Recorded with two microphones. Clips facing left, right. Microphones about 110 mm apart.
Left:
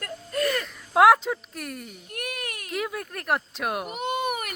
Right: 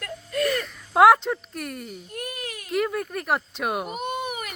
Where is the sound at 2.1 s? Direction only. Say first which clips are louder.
Left 1 dB; 70° left (ahead or behind).